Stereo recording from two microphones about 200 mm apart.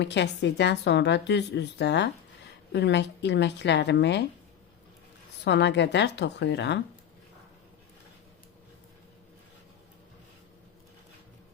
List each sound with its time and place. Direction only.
0.0 s speech: 60° left (ahead or behind)
5.5 s speech: 60° left (ahead or behind)